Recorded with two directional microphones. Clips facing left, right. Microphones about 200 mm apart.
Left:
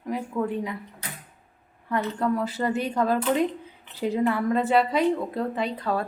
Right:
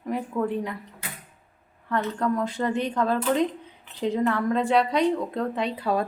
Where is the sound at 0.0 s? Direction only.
Centre (ahead or behind).